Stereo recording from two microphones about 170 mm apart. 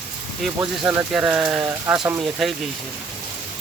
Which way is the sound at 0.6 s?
10° right (ahead or behind).